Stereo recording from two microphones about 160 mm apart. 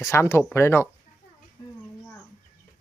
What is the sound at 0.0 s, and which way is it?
Speech, 20° left (ahead or behind).